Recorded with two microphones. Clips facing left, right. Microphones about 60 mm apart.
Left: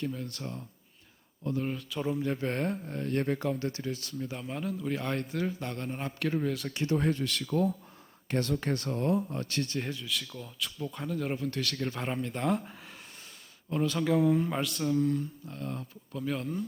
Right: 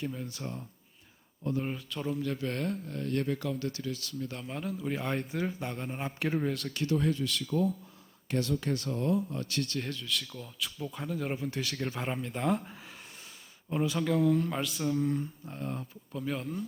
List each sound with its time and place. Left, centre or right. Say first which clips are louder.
0.0 s a man's voice: left 1 dB; centre
1.9 s speech: left 2 dB; centre
2.1 s speech: left 2 dB; left
4.3 s a man's voice: left 3 dB; centre
6.5 s speech: left 1 dB; centre
6.9 s speech: left 1 dB; left
9.7 s a man's voice: left 1 dB; centre
14.0 s speech: left 2 dB; centre
14.6 s speech: left 2 dB; centre
15.0 s a sound: left 2 dB; centre
16.1 s speech: left 2 dB; centre